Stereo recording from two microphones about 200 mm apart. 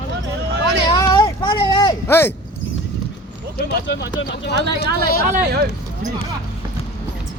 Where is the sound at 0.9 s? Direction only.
20° left (ahead or behind).